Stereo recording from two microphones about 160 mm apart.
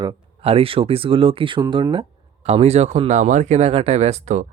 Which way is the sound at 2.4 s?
45° right (ahead or behind).